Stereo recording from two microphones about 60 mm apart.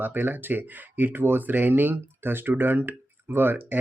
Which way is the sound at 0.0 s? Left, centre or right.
Right.